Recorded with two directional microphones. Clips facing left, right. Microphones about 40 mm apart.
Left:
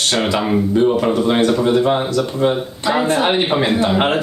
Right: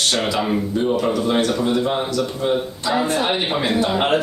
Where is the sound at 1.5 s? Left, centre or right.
Centre.